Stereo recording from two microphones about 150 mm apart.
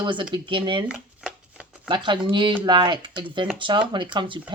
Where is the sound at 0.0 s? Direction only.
35° right (ahead or behind).